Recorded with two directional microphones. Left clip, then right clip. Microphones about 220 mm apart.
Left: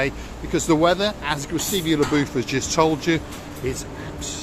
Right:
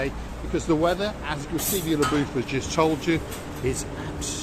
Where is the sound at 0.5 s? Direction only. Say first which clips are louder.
Left 5 dB; 35° left (ahead or behind).